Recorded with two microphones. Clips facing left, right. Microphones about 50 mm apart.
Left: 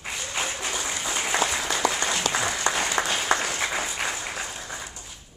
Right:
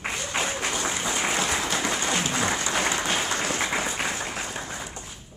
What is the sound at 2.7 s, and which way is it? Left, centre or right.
Applause, left.